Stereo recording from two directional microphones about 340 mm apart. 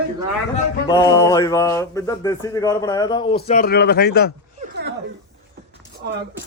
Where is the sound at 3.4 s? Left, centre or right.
Left.